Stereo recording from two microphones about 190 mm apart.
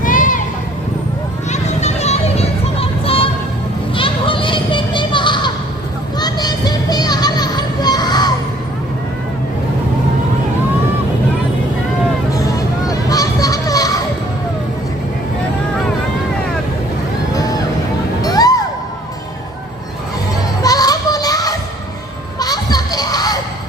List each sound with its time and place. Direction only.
0.0 s a sound: 45° left (ahead or behind)
1.5 s children playing: 35° left (ahead or behind)
3.0 s music: 30° left (ahead or behind)
3.9 s a sound: 25° left (ahead or behind)
6.1 s music: 20° left (ahead or behind)
12.3 s children playing: 20° left (ahead or behind)
17.3 s vehicle: 20° left (ahead or behind)
18.2 s music: 20° left (ahead or behind)
20.6 s children playing: 20° left (ahead or behind)